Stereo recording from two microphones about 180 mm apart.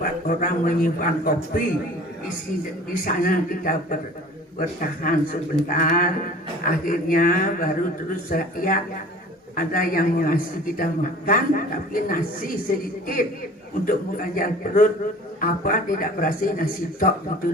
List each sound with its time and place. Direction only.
0.0 s a woman's voice: 50° left (ahead or behind)
2.9 s a woman's voice: 50° left (ahead or behind)